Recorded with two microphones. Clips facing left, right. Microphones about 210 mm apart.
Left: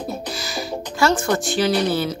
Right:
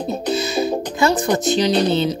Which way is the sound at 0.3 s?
20° right (ahead or behind).